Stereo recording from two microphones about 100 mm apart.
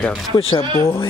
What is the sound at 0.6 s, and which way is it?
Speech, 25° left (ahead or behind).